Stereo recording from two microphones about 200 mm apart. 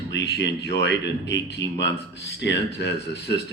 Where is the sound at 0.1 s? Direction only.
60° left (ahead or behind).